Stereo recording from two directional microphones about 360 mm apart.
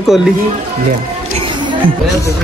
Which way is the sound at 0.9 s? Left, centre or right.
Centre.